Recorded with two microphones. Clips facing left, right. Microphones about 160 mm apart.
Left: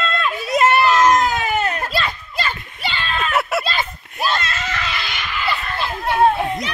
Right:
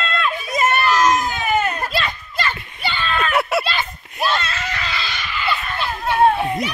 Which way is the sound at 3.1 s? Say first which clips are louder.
Right 1 dB; centre (ahead or behind).